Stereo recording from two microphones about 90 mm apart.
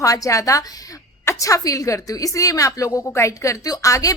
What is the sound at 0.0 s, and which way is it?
A woman's voice, 40° left (ahead or behind).